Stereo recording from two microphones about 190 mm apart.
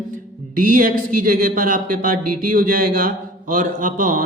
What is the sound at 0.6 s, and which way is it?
A man's voice, 45° right (ahead or behind).